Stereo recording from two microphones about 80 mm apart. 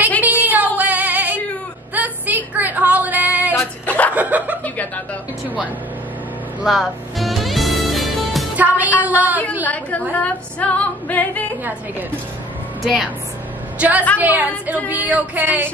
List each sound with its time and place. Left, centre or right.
0.2 s female singing: right
2.0 s a sound: right
3.8 s chuckle: left
4.1 s chuckle: right
4.6 s chuckle: left
6.6 s music: centre
8.5 s music: right
9.0 s a sound: right
9.7 s a woman's voice: centre
10.1 s female singing: centre
12.8 s speech: centre
13.7 s a woman's voice: centre